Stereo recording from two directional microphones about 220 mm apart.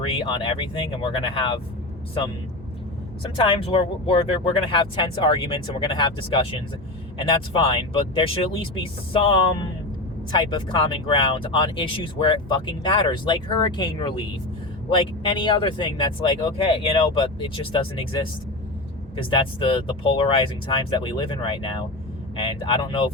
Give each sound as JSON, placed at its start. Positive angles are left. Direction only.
{"t": 0.0, "sound": "speech", "side_deg": 20}
{"t": 3.2, "sound": "speech", "side_deg": 25}